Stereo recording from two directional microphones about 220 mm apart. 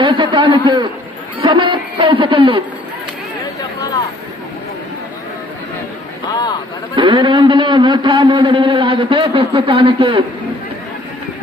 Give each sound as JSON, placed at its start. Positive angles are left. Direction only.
{"t": 0.0, "sound": "speech", "side_deg": -25}
{"t": 6.3, "sound": "speech", "side_deg": 20}
{"t": 6.9, "sound": "speech", "side_deg": -20}